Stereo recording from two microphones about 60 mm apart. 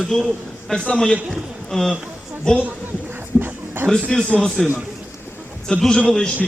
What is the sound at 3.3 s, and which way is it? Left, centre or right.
Dog, left.